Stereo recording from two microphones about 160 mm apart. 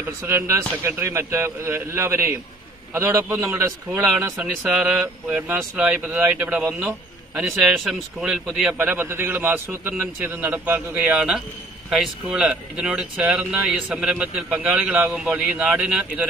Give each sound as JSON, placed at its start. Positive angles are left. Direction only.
{"t": 0.2, "sound": "a man's voice", "side_deg": -15}